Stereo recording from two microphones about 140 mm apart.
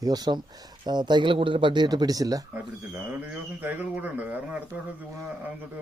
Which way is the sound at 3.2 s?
15° right (ahead or behind).